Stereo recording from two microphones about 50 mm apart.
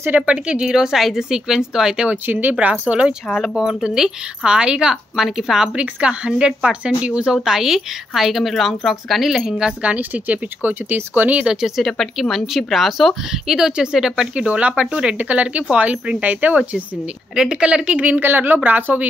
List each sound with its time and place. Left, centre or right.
0.3 s speech: right
0.7 s a woman's voice: centre
2.0 s speech: right
3.3 s a woman's voice: centre
3.6 s a woman's voice: centre
5.8 s speech: right
7.4 s a woman's voice: centre
9.3 s a woman's voice: centre
9.8 s speech: right
11.6 s a woman's voice: centre
13.3 s a woman's voice: centre
14.3 s speech: right
17.4 s speech: centre
18.0 s speech: right